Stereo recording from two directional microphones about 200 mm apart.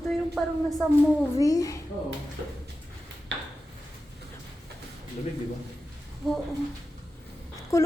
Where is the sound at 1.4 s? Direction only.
15° left (ahead or behind).